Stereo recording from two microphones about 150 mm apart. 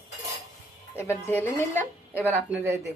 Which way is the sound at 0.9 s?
15° left (ahead or behind).